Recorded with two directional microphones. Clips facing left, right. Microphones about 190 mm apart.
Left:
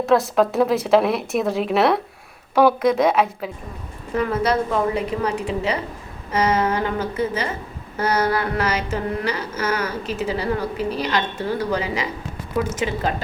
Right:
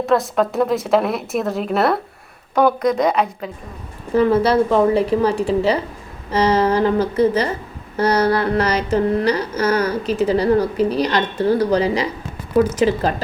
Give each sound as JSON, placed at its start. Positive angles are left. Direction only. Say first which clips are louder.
{"t": 0.0, "sound": "a woman's voice", "louder": "even", "side_deg": 0}
{"t": 4.1, "sound": "a woman's voice", "louder": "right 6 dB", "side_deg": -30}